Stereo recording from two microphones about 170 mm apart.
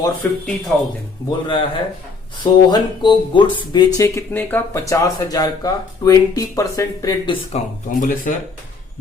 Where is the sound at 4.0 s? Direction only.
15° left (ahead or behind).